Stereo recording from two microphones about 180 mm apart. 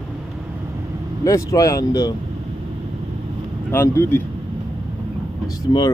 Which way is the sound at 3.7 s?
15° left (ahead or behind).